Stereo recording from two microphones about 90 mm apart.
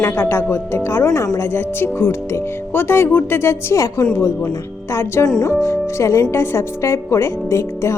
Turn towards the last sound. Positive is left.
turn(degrees=30)  # may be behind; listen again after turning